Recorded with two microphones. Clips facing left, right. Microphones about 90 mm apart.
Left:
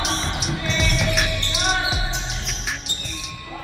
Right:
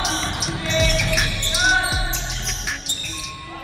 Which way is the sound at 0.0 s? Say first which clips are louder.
Right 1 dB; centre (ahead or behind).